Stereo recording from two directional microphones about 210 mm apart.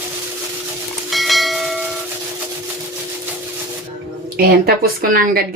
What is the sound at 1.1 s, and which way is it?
Church bell, centre (ahead or behind).